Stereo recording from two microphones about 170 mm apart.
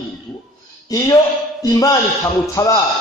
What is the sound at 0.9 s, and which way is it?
A man's voice, 20° left (ahead or behind).